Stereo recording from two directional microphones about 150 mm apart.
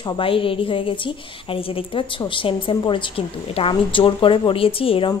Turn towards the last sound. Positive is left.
turn(degrees=40)  # may be behind; listen again after turning